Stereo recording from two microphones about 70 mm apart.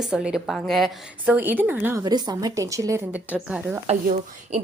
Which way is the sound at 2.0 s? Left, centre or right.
Right.